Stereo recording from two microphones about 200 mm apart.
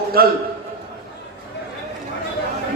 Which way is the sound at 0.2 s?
50° right (ahead or behind).